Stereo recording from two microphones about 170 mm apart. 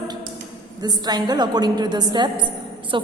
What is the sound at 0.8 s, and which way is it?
A woman's voice, 25° right (ahead or behind).